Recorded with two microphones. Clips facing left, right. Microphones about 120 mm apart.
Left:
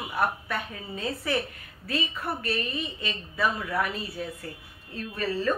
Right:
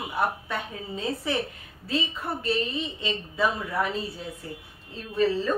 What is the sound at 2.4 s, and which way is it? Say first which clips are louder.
A woman's voice: right 3 dB; 25° right (ahead or behind).